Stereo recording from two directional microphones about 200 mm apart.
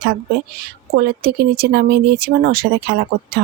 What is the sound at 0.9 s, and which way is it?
Speech, 50° right (ahead or behind).